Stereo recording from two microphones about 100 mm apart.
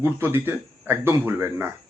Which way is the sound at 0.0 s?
25° right (ahead or behind).